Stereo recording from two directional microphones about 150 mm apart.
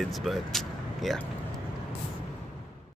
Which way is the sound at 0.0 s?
Centre (ahead or behind).